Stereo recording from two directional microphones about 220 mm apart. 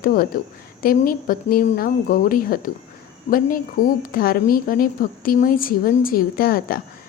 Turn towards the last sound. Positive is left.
turn(degrees=40)  # may be behind; listen again after turning